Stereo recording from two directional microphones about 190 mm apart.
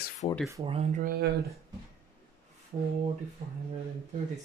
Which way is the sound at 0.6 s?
30° right (ahead or behind).